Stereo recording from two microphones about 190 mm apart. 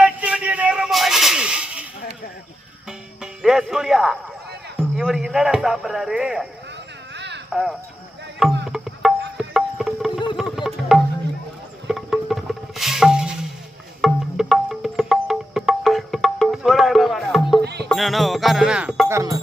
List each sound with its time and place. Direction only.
0.0 s a sound: 5° right (ahead or behind)
3.2 s music: centre (ahead or behind)
4.8 s speech: centre (ahead or behind)
7.1 s a sound: 65° right (ahead or behind)
7.5 s speech: centre (ahead or behind)
8.4 s music: centre (ahead or behind)
17.8 s speech: centre (ahead or behind)
19.0 s speech: 15° right (ahead or behind)